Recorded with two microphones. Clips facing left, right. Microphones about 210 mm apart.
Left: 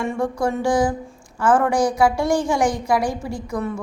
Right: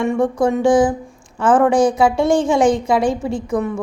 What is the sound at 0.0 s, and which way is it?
A woman's voice, 20° right (ahead or behind).